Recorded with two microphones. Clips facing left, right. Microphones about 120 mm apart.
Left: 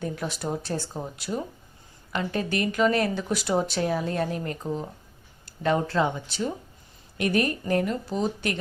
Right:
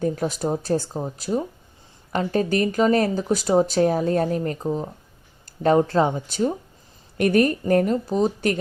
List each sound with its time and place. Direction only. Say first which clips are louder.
0.0 s speech: right 7 dB; 40° right (ahead or behind)